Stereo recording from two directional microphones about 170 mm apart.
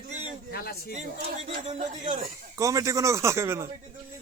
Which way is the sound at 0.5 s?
65° left (ahead or behind).